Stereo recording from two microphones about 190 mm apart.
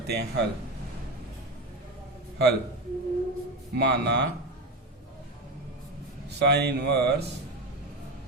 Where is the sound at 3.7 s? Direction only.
60° right (ahead or behind).